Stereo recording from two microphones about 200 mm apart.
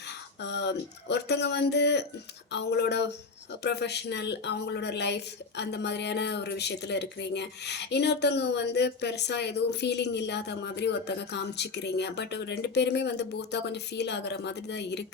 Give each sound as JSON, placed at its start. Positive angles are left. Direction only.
{"t": 0.4, "sound": "speech", "side_deg": 60}